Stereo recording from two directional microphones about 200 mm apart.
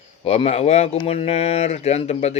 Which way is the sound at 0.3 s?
30° left (ahead or behind).